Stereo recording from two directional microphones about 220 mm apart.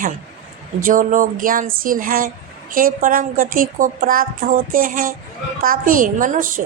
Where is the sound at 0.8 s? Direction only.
40° right (ahead or behind).